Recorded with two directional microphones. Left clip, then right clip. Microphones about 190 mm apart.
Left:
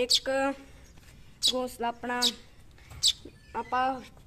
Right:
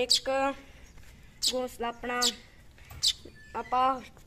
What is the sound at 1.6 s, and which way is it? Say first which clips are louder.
Speech: left 1 dB; 15° left (ahead or behind).